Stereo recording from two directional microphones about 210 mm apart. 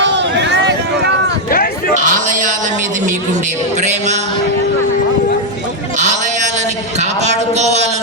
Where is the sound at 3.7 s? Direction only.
35° right (ahead or behind).